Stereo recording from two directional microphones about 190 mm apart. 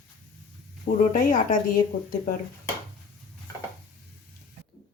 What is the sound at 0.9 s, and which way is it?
Speech, 45° left (ahead or behind).